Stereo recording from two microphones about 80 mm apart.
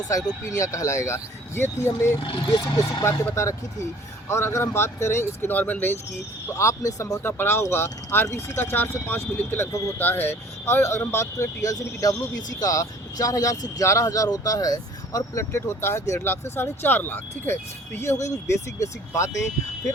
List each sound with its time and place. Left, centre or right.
0.1 s speech: left
0.6 s speech: left
2.1 s speech: left
3.0 s speech: left
6.5 s speech: left
7.2 s speech: left